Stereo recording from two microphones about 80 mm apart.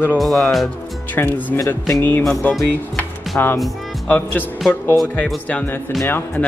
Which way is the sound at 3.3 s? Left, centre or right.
Left.